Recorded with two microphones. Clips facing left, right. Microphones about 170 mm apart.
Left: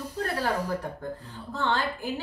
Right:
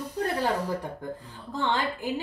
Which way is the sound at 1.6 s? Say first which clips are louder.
Even; 15° right (ahead or behind).